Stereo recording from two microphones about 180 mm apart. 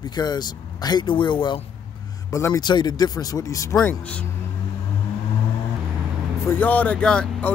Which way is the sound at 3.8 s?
5° left (ahead or behind).